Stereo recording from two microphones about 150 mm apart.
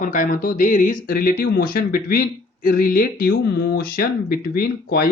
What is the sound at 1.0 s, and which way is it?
Speech, 70° left (ahead or behind).